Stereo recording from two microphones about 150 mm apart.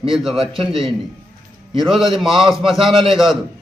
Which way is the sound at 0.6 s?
35° right (ahead or behind).